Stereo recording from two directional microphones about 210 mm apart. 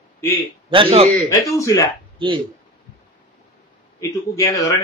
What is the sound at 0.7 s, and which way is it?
Speech, 25° right (ahead or behind).